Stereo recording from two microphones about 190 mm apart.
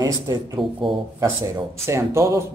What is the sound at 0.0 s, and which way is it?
Speech, 15° right (ahead or behind).